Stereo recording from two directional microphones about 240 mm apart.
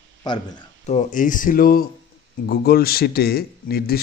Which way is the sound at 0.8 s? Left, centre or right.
Left.